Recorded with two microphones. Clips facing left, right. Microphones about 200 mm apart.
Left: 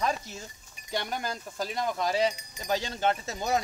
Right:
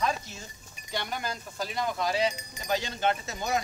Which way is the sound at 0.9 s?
45° left (ahead or behind).